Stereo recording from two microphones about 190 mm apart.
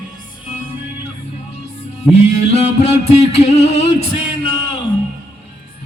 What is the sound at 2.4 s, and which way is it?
Music, 35° left (ahead or behind).